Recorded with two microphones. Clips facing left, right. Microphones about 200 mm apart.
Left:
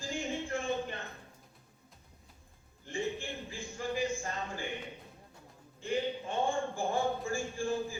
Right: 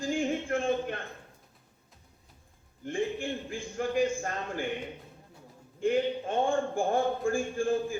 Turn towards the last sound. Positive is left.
turn(degrees=-55)  # may be behind; listen again after turning